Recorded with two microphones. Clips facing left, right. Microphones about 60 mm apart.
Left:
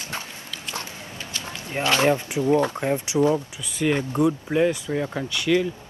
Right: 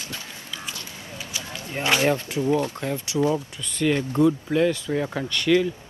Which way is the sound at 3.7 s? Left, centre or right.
Centre.